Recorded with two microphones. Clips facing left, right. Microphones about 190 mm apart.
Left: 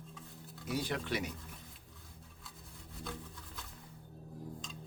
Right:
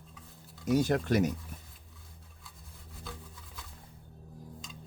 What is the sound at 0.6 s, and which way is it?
Speech, 45° right (ahead or behind).